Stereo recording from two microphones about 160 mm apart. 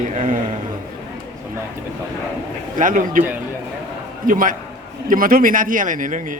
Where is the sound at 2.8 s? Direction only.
55° right (ahead or behind).